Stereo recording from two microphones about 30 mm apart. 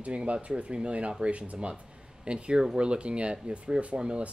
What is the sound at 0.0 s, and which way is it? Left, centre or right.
Speech, right.